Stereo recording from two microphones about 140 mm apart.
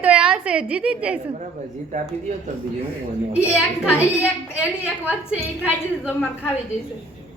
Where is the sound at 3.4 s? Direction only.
20° left (ahead or behind).